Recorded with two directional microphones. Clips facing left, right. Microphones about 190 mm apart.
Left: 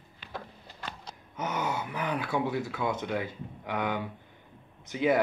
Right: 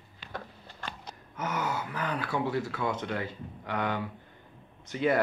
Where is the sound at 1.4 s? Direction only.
20° left (ahead or behind).